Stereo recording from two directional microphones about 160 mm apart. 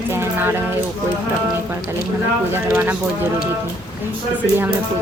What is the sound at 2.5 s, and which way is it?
Speech, 15° right (ahead or behind).